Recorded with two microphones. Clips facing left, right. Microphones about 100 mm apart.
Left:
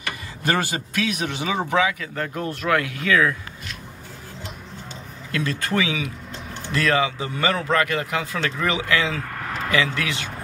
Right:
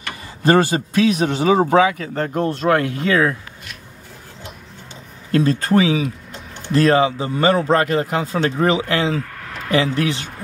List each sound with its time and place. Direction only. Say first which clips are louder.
0.0 s speech: right 7 dB; 30° right (ahead or behind)
5.3 s speech: right 8 dB; 35° right (ahead or behind)